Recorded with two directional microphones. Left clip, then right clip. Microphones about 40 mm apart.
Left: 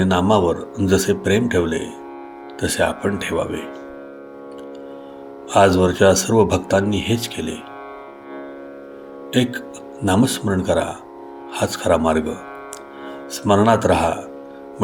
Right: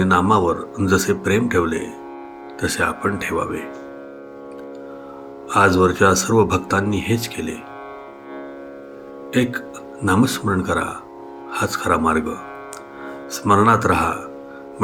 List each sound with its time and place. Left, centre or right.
0.0 s speech: centre
5.5 s speech: centre
5.7 s speech: centre
9.3 s music: centre
10.2 s speech: centre
13.5 s speech: centre